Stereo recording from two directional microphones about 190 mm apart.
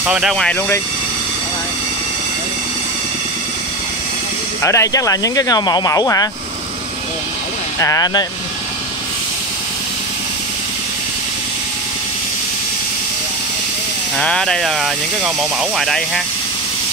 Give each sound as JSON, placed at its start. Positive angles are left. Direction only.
{"t": 0.0, "sound": "speech", "side_deg": -5}
{"t": 4.6, "sound": "speech", "side_deg": 15}
{"t": 7.8, "sound": "speech", "side_deg": 20}
{"t": 14.1, "sound": "speech", "side_deg": 5}